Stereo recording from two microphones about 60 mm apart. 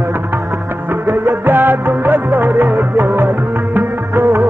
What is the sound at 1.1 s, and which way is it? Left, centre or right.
Music, right.